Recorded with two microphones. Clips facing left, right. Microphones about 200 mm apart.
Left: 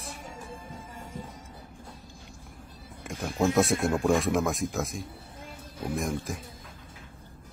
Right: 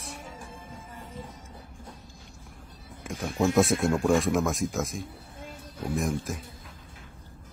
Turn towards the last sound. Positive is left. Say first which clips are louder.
# right 2 dB
turn(degrees=0)  # may be behind; listen again after turning